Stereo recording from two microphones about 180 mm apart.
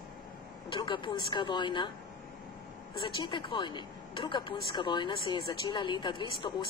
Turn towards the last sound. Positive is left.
turn(degrees=25)  # may be behind; listen again after turning